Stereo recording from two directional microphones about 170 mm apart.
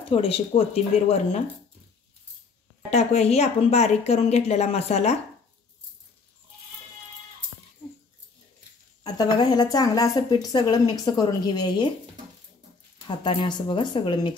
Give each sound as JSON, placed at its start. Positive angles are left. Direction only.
{"t": 0.1, "sound": "speech", "side_deg": 35}
{"t": 2.9, "sound": "speech", "side_deg": 40}
{"t": 9.0, "sound": "speech", "side_deg": 25}
{"t": 13.0, "sound": "speech", "side_deg": 30}